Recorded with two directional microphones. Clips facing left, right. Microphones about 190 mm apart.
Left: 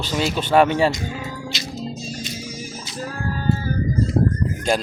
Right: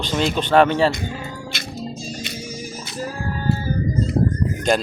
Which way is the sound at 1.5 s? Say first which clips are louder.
Left 1 dB; 60° right (ahead or behind).